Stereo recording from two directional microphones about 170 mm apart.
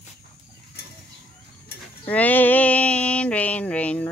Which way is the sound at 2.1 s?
10° left (ahead or behind).